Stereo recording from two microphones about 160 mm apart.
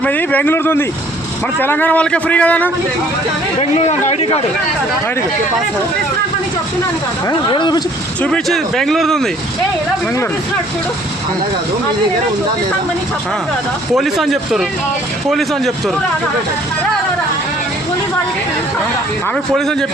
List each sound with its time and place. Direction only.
0.0 s a man's voice: 10° left (ahead or behind)
3.6 s a man's voice: 40° left (ahead or behind)
7.3 s speech: 30° left (ahead or behind)
8.2 s speech: 5° left (ahead or behind)
13.9 s speech: centre (ahead or behind)